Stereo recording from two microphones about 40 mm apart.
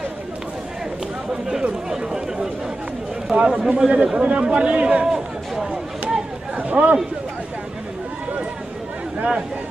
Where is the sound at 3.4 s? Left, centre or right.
Right.